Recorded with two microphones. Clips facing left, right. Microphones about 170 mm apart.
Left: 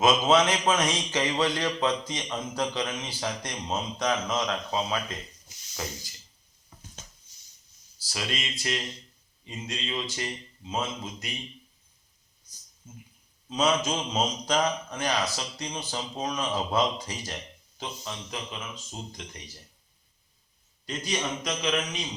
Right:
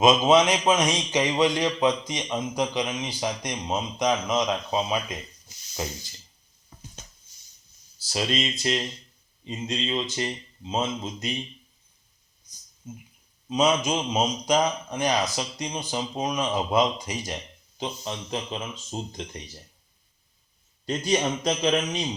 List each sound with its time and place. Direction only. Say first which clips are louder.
0.0 s a man's voice: right 3 dB; 15° right (ahead or behind)
7.9 s a man's voice: right 7 dB; 25° right (ahead or behind)
12.8 s a man's voice: right 7 dB; 15° right (ahead or behind)
20.8 s a man's voice: right 7 dB; 30° right (ahead or behind)